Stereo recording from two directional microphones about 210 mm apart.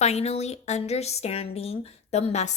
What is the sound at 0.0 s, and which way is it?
A woman's voice, 30° left (ahead or behind).